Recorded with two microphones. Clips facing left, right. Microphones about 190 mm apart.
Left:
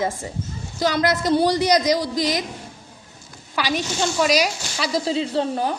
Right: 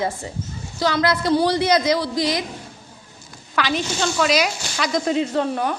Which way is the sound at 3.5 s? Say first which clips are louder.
Right 1 dB; 10° left (ahead or behind).